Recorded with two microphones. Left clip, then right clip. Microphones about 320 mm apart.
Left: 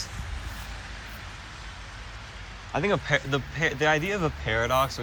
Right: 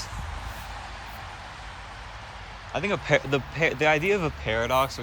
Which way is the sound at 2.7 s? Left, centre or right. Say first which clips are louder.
Right 1 dB; centre.